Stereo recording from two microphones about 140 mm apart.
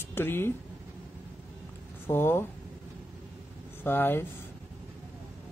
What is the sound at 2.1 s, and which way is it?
Speech, 15° left (ahead or behind).